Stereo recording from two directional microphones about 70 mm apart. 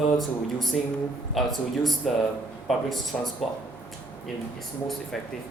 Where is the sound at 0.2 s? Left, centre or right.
Centre.